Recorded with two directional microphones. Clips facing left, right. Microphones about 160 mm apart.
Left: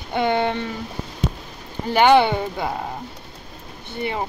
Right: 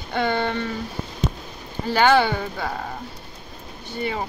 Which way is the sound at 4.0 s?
20° left (ahead or behind).